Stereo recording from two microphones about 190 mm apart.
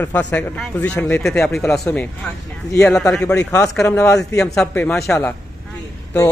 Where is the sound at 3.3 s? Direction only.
15° left (ahead or behind).